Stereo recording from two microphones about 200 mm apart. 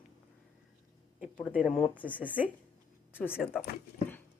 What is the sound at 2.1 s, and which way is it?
Speech, 10° right (ahead or behind).